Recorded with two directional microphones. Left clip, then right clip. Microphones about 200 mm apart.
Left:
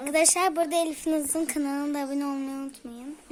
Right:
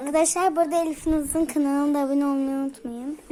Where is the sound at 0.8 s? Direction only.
30° left (ahead or behind).